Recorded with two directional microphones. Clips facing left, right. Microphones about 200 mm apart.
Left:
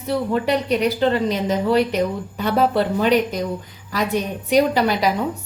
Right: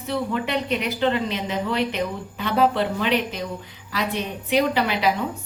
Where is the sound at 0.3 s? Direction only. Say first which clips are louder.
Left 5 dB; 40° left (ahead or behind).